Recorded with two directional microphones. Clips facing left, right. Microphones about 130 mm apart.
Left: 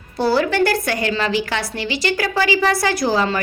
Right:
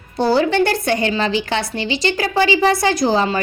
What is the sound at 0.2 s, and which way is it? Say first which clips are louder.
A woman's voice: right 2 dB; 25° right (ahead or behind).